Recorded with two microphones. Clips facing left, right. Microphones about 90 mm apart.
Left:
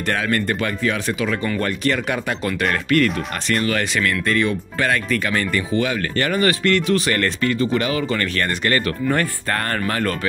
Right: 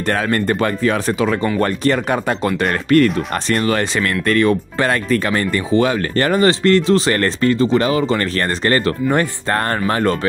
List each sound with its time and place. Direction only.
0.1 s speech: 35° right (ahead or behind)
4.3 s speech: 50° right (ahead or behind)
4.7 s speech: 35° right (ahead or behind)
9.0 s speech: 20° right (ahead or behind)